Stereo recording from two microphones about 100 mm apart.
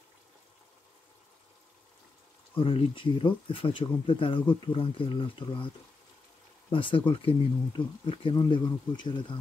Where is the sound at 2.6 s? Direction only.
60° left (ahead or behind).